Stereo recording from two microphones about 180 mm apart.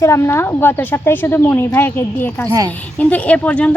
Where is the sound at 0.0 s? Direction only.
15° left (ahead or behind).